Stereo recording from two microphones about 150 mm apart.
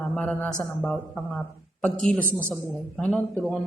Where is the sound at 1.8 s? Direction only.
5° left (ahead or behind).